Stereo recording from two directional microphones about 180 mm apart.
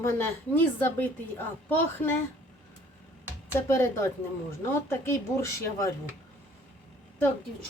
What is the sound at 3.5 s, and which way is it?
Speech, 15° left (ahead or behind).